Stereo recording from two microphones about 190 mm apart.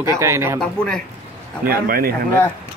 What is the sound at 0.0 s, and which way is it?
Speech, 15° right (ahead or behind).